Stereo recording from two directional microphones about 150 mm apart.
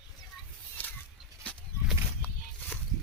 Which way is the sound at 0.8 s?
10° left (ahead or behind).